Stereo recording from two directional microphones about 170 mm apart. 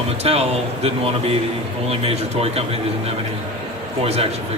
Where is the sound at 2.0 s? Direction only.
35° right (ahead or behind).